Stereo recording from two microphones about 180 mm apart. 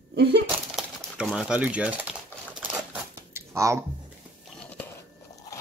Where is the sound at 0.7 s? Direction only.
5° right (ahead or behind).